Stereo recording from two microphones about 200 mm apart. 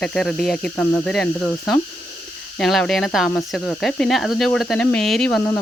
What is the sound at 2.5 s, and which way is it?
Speech, 5° left (ahead or behind).